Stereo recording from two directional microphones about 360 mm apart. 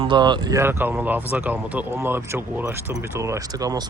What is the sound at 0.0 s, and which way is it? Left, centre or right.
Speech, centre.